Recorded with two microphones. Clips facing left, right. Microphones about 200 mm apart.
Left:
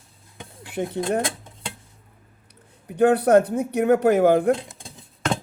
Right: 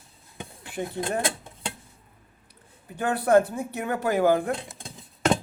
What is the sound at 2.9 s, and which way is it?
Speech, 65° left (ahead or behind).